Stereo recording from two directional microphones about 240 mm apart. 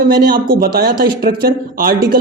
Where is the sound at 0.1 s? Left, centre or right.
Right.